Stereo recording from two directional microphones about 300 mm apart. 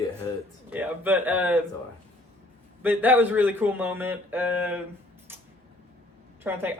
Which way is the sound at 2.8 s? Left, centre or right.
Centre.